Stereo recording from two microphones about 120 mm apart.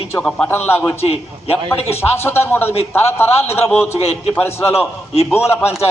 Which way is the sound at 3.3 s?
60° left (ahead or behind).